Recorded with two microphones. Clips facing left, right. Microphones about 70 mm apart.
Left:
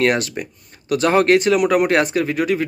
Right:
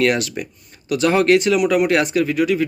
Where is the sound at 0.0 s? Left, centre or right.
Left.